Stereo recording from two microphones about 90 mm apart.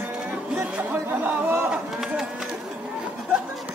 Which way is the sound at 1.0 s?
25° right (ahead or behind).